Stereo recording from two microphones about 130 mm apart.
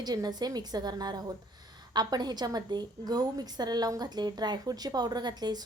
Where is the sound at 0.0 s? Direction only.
30° right (ahead or behind).